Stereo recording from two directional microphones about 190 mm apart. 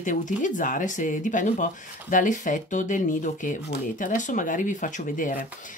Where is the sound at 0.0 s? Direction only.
40° left (ahead or behind).